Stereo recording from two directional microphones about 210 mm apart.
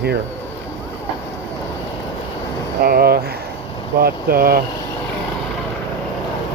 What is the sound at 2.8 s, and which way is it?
Speech, 45° right (ahead or behind).